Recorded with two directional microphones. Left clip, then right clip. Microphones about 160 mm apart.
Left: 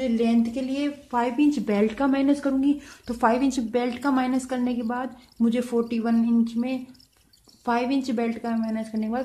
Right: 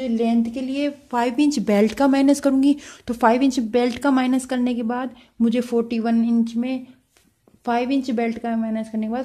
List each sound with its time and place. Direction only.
0.0 s a woman's voice: 25° right (ahead or behind); by 2.7 s 60° right (ahead or behind)
2.9 s a woman's voice: 40° right (ahead or behind)